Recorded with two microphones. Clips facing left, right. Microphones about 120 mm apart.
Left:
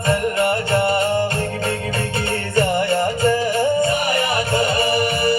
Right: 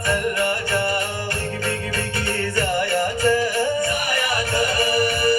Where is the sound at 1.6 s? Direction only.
25° left (ahead or behind).